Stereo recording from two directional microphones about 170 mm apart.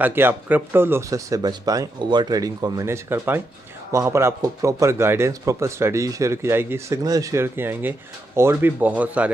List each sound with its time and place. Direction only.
0.0 s a man's voice: 10° right (ahead or behind)